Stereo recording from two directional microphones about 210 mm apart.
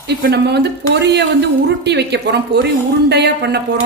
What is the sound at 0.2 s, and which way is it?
A woman's voice, 55° right (ahead or behind).